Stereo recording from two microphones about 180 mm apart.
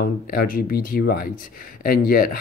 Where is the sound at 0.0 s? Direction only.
55° left (ahead or behind).